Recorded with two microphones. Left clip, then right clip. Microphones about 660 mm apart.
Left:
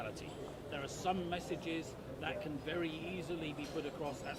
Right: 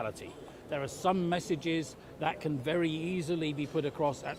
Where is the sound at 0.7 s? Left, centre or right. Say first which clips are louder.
Right 8 dB; right.